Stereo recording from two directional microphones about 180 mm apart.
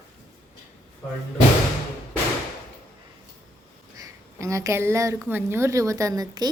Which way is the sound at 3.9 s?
15° right (ahead or behind).